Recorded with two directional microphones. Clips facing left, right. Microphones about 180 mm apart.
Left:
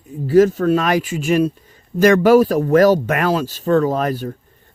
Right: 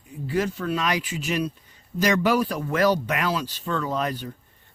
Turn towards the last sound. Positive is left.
turn(degrees=45)  # may be behind; listen again after turning